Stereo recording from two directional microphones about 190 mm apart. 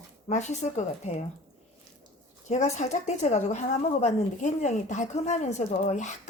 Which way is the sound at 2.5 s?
40° left (ahead or behind).